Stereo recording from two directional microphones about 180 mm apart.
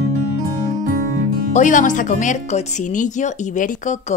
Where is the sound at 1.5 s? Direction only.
45° left (ahead or behind).